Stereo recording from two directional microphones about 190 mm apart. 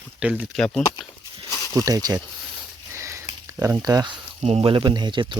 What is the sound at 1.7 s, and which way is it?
Speech, 20° right (ahead or behind).